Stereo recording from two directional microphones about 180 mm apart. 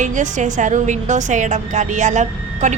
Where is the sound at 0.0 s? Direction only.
45° right (ahead or behind).